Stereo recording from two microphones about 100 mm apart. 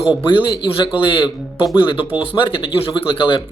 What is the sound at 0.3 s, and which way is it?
Speech, 50° left (ahead or behind).